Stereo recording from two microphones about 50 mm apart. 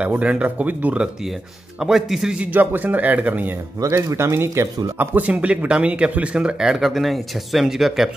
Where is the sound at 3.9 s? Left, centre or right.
Right.